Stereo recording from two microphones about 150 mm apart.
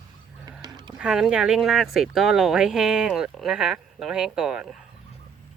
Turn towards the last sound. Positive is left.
turn(degrees=-5)  # may be behind; listen again after turning